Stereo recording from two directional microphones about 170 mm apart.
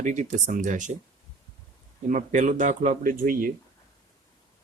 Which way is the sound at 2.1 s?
50° right (ahead or behind).